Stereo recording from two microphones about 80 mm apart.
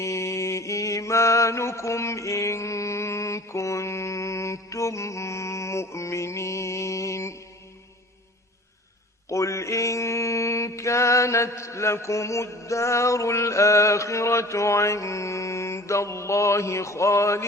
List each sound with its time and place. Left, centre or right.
0.0 s mantra: left
9.3 s mantra: left